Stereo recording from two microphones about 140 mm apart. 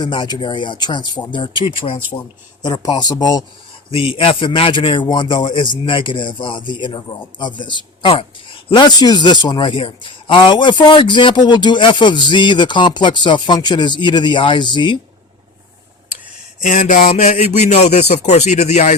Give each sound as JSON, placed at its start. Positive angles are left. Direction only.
{"t": 0.0, "sound": "speech", "side_deg": 35}
{"t": 2.1, "sound": "speech", "side_deg": 30}
{"t": 3.9, "sound": "speech", "side_deg": 40}
{"t": 16.6, "sound": "speech", "side_deg": 60}